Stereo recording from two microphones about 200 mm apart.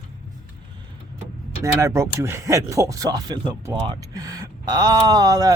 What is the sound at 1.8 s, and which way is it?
Speech, 15° right (ahead or behind).